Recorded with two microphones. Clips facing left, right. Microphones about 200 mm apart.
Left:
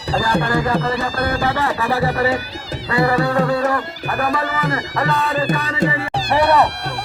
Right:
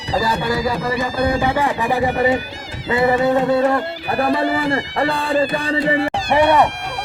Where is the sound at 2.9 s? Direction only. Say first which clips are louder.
Right 2 dB; 20° right (ahead or behind).